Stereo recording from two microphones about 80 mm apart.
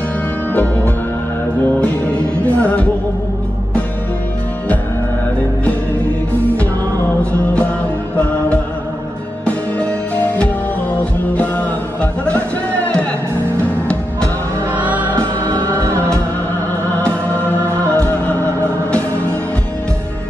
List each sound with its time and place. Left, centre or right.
1.8 s music: centre
9.4 s music: centre
14.7 s music: centre
15.8 s music: right
17.0 s music: centre